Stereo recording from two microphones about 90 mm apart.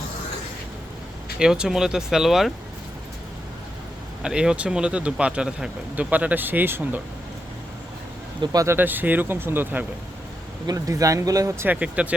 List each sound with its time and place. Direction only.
1.4 s speech: 5° right (ahead or behind)
4.2 s speech: 10° right (ahead or behind)
8.5 s speech: 30° right (ahead or behind)
10.7 s speech: 40° right (ahead or behind)
11.6 s speech: 15° right (ahead or behind)